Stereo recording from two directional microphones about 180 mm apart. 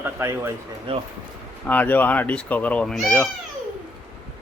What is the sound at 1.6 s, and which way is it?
Speech, 10° left (ahead or behind).